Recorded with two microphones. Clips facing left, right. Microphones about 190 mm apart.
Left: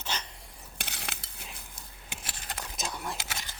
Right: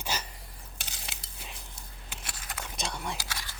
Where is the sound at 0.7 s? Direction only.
65° left (ahead or behind).